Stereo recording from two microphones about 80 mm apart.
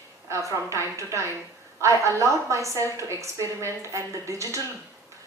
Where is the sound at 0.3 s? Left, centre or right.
Right.